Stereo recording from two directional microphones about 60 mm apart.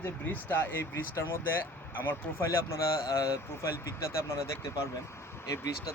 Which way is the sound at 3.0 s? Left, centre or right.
Left.